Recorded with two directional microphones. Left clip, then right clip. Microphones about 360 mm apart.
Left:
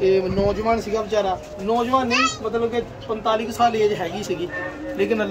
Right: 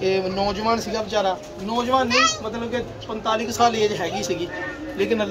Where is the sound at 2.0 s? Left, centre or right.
Right.